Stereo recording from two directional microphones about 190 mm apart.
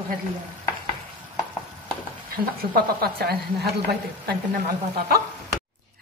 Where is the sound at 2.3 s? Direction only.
50° right (ahead or behind).